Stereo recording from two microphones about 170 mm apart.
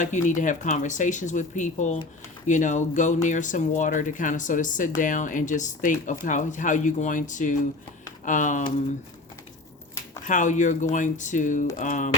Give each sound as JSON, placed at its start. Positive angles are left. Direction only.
{"t": 0.0, "sound": "speech", "side_deg": 45}
{"t": 10.2, "sound": "speech", "side_deg": 45}